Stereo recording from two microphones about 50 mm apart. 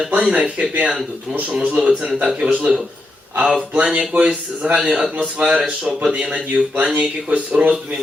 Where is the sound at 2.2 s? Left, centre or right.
Centre.